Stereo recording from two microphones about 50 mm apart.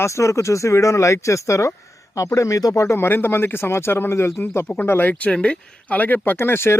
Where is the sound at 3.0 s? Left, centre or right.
Left.